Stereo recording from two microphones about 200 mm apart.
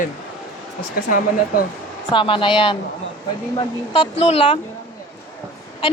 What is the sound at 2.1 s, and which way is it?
Speech, 25° left (ahead or behind).